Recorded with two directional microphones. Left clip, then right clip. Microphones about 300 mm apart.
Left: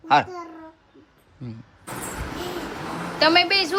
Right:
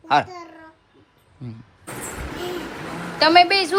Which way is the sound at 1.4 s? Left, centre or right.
Centre.